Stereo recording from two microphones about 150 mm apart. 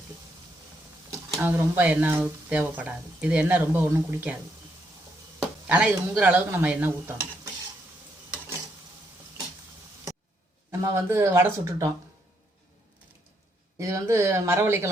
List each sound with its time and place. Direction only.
1.4 s speech: 15° right (ahead or behind)
5.4 s speech: 10° right (ahead or behind)
10.7 s speech: 20° right (ahead or behind)
13.7 s speech: 20° right (ahead or behind)